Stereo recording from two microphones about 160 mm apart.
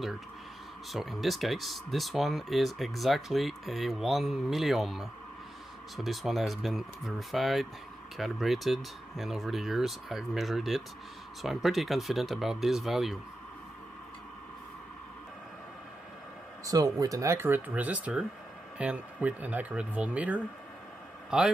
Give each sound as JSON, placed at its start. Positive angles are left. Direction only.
{"t": 0.9, "sound": "speech", "side_deg": 0}
{"t": 16.6, "sound": "speech", "side_deg": -20}